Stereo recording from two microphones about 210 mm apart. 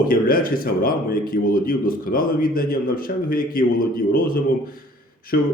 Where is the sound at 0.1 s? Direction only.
45° left (ahead or behind).